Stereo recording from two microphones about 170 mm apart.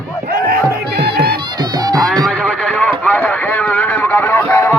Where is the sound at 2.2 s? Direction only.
5° left (ahead or behind).